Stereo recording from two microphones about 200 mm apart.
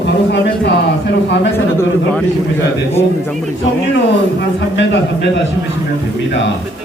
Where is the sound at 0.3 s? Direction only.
55° left (ahead or behind).